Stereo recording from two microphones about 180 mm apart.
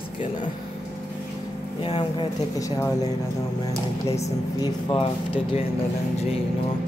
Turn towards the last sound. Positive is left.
turn(degrees=30)  # may be behind; listen again after turning